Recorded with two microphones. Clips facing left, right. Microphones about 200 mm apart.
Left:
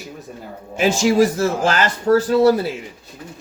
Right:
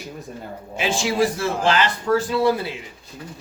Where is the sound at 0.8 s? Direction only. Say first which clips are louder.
Left 6 dB; 45° left (ahead or behind).